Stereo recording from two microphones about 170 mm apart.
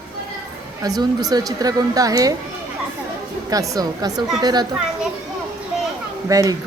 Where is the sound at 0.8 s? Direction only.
20° right (ahead or behind).